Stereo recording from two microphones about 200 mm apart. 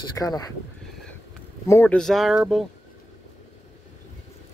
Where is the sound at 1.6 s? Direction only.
10° left (ahead or behind).